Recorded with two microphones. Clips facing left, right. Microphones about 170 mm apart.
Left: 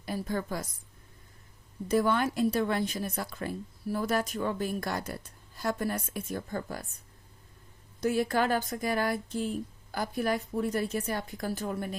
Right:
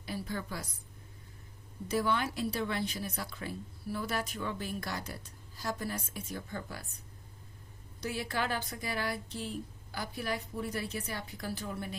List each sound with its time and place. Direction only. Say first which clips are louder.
0.0 s a woman's voice: left 5 dB; 45° left (ahead or behind)
1.9 s speech: left 5 dB; 50° left (ahead or behind)
8.0 s speech: left 8 dB; 45° left (ahead or behind)